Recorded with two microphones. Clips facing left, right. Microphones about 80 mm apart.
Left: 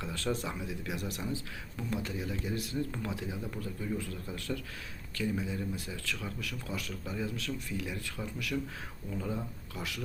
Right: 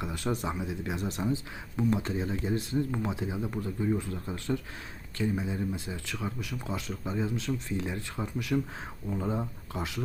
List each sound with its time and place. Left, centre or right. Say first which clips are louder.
0.0 s speech: right 3 dB; centre